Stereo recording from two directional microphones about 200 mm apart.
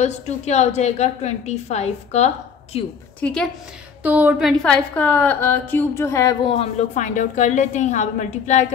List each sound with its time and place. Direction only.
0.0 s a woman's voice: 35° left (ahead or behind)
3.2 s a woman's voice: 5° left (ahead or behind)
4.0 s a woman's voice: 5° right (ahead or behind); by 6.3 s 15° left (ahead or behind)
6.4 s a woman's voice: 30° left (ahead or behind)